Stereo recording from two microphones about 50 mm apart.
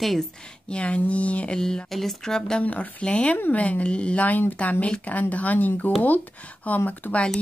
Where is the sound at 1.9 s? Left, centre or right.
Centre.